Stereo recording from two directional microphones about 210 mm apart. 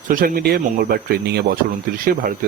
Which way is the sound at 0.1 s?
40° right (ahead or behind).